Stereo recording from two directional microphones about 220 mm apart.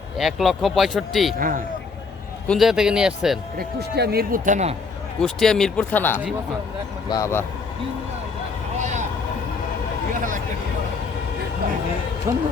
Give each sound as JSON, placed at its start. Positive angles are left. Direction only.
{"t": 0.2, "sound": "speech", "side_deg": 0}
{"t": 1.4, "sound": "a man's voice", "side_deg": -40}
{"t": 2.5, "sound": "speech", "side_deg": 0}
{"t": 3.6, "sound": "speech", "side_deg": -45}
{"t": 5.2, "sound": "speech", "side_deg": 0}
{"t": 8.8, "sound": "vehicle", "side_deg": -35}
{"t": 10.2, "sound": "a sound", "side_deg": -35}
{"t": 12.3, "sound": "speech", "side_deg": -10}